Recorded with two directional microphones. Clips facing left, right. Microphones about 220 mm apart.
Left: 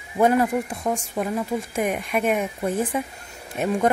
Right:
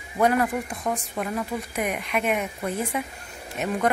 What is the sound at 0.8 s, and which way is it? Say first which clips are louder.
Speech: left 2 dB; 15° left (ahead or behind).